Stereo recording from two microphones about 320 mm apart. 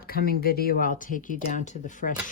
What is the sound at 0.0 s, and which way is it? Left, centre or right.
Speech, left.